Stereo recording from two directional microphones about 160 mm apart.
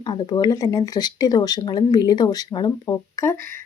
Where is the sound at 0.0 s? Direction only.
30° left (ahead or behind).